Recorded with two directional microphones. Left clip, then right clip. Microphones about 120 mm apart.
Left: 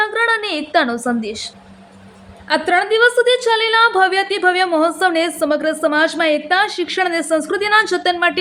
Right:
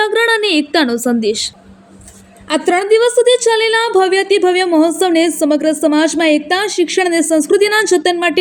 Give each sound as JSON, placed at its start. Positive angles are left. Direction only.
{"t": 0.0, "sound": "a woman's voice", "side_deg": -35}
{"t": 2.5, "sound": "a woman's voice", "side_deg": -25}